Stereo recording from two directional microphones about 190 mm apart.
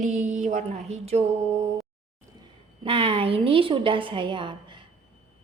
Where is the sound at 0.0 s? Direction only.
40° right (ahead or behind).